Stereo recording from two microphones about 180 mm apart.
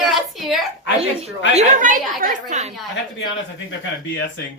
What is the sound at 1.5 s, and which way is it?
A woman's voice, 45° right (ahead or behind).